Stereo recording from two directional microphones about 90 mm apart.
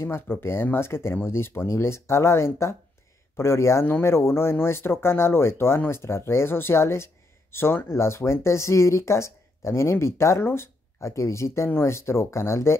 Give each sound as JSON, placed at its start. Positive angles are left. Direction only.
{"t": 0.0, "sound": "speech", "side_deg": 25}